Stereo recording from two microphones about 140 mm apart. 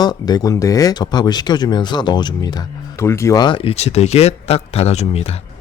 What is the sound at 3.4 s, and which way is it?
Speech, 40° left (ahead or behind).